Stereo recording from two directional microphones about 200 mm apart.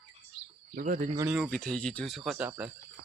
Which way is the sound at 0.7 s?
40° right (ahead or behind).